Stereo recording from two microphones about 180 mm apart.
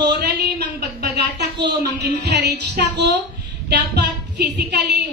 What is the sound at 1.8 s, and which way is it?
Music, 65° right (ahead or behind).